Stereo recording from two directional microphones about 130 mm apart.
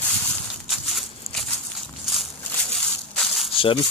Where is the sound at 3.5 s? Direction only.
45° left (ahead or behind).